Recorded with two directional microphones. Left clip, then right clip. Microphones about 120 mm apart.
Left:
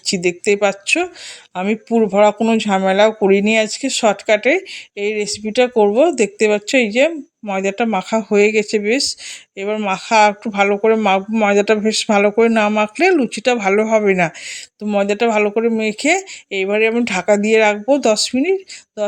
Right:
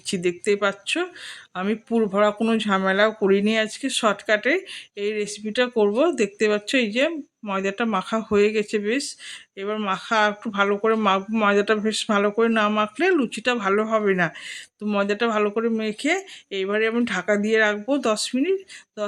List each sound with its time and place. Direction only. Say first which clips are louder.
0.0 s speech: left 7 dB; 30° left (ahead or behind)